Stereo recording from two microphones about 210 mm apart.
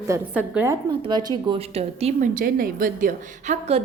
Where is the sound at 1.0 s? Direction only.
20° right (ahead or behind).